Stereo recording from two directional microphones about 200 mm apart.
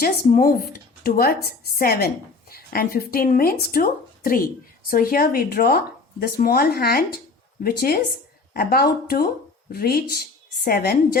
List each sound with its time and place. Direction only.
0.0 s a woman's voice: 45° left (ahead or behind)